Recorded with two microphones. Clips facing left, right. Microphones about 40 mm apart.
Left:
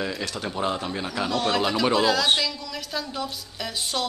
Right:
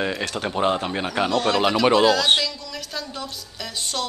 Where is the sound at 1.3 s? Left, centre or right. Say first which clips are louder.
Right 3 dB; centre.